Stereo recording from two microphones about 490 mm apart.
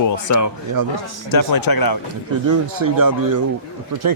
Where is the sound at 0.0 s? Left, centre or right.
Left.